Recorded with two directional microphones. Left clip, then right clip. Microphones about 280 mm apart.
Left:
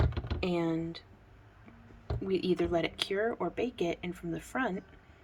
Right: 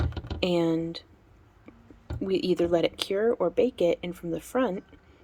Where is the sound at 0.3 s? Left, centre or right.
Right.